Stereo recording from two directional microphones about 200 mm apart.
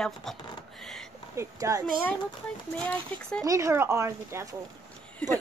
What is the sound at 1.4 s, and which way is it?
Speech, 15° right (ahead or behind).